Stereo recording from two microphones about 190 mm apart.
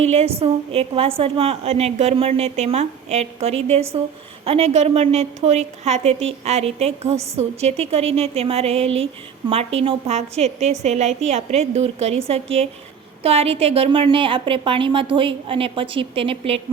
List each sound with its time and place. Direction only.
0.0 s a woman's voice: 35° right (ahead or behind)